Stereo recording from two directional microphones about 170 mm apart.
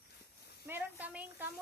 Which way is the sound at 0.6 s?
10° right (ahead or behind).